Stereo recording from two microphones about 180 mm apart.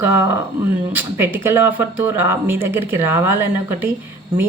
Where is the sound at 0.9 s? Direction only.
10° right (ahead or behind).